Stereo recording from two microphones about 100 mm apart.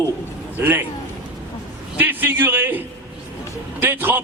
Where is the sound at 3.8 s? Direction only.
20° right (ahead or behind).